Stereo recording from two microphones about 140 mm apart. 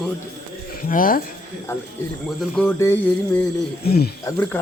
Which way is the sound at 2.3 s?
Centre (ahead or behind).